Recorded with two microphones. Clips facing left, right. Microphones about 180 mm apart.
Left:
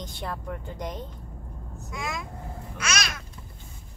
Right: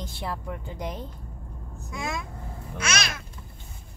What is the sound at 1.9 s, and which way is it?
Speech, 25° right (ahead or behind).